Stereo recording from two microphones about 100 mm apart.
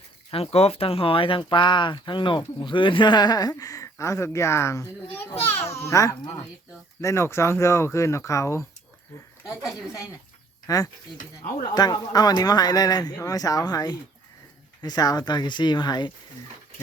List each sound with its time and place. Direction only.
0.3 s speech: 85° left; by 8.6 s 30° left (ahead or behind)
10.7 s speech: 35° left (ahead or behind)